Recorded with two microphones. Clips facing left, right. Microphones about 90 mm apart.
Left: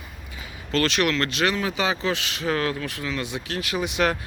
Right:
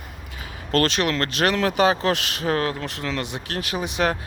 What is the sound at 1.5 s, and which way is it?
Speech, 65° right (ahead or behind).